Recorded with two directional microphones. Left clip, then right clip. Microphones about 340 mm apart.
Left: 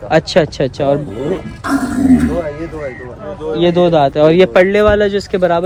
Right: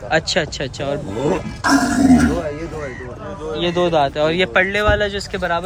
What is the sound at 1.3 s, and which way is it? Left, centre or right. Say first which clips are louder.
Speech: right 2 dB; right.